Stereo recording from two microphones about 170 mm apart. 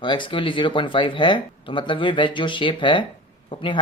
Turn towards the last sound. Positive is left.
turn(degrees=30)  # may be behind; listen again after turning